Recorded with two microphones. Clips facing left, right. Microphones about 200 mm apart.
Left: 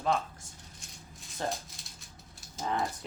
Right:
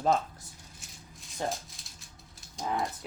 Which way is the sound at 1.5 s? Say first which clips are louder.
Left 2 dB; centre (ahead or behind).